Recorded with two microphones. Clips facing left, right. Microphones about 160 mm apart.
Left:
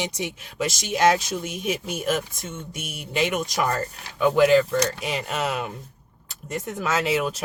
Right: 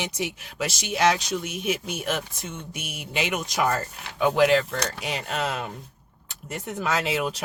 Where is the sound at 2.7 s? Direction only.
40° left (ahead or behind).